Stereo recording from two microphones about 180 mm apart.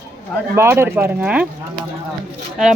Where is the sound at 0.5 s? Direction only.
15° right (ahead or behind).